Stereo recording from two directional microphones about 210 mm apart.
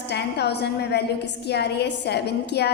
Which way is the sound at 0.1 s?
50° left (ahead or behind).